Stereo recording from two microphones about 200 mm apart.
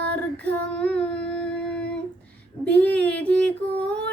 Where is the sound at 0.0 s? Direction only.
55° right (ahead or behind).